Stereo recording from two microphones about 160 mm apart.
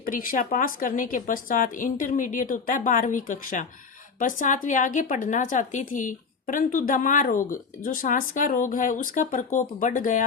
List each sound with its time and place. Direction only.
0.0 s a woman's voice: 60° left (ahead or behind)